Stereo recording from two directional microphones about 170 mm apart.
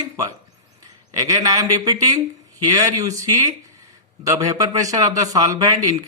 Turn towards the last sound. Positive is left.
turn(degrees=-20)  # may be behind; listen again after turning